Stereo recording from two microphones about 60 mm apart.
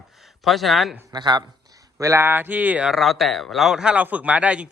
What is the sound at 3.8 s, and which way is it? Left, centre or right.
Speech, centre.